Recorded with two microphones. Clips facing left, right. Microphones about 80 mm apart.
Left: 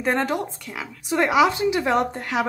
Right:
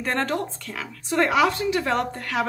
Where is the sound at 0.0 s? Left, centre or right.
Centre.